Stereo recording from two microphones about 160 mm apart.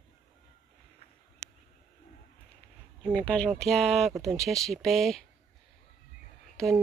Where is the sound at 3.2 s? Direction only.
5° left (ahead or behind).